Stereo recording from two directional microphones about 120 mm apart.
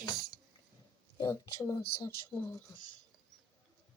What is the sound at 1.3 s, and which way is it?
Speech, 25° left (ahead or behind).